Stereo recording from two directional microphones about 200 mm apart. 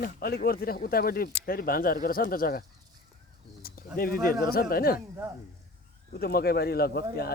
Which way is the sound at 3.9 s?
45° left (ahead or behind).